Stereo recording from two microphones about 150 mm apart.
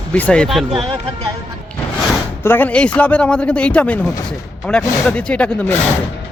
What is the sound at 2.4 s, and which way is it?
Speech, 15° left (ahead or behind).